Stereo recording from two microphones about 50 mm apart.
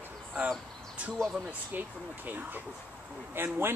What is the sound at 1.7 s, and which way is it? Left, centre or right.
Speech, right.